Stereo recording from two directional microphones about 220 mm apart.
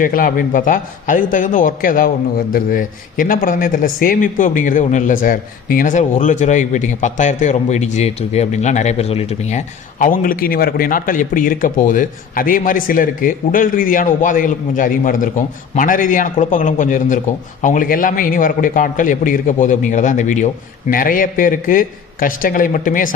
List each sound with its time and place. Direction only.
0.0 s speech: 40° left (ahead or behind)